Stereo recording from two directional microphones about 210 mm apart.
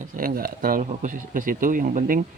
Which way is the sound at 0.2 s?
45° right (ahead or behind).